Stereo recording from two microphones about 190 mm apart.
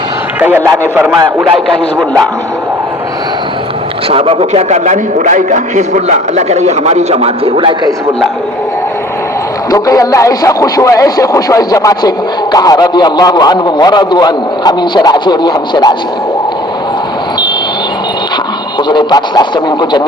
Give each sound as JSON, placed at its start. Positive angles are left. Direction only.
{"t": 0.3, "sound": "a man's voice", "side_deg": -10}
{"t": 1.6, "sound": "speech", "side_deg": 0}
{"t": 4.1, "sound": "a man's voice", "side_deg": -30}
{"t": 9.7, "sound": "speech", "side_deg": 15}
{"t": 18.9, "sound": "speech", "side_deg": 25}